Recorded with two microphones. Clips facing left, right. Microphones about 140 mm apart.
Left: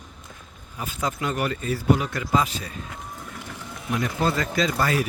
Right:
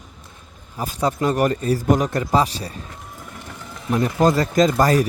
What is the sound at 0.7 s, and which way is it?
A man's voice, 35° right (ahead or behind).